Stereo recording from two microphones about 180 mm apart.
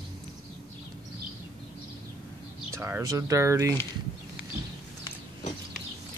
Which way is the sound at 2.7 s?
15° right (ahead or behind).